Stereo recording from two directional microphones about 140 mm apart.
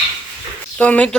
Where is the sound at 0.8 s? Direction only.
10° left (ahead or behind).